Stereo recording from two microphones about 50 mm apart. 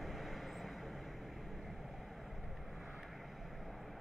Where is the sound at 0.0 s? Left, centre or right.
Centre.